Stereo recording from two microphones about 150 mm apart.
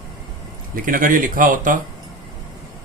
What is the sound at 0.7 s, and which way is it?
Speech, 65° right (ahead or behind).